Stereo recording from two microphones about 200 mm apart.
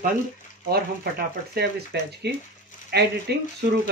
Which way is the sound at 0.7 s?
50° right (ahead or behind).